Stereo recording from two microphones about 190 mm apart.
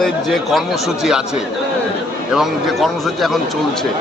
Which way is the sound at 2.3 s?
Centre (ahead or behind).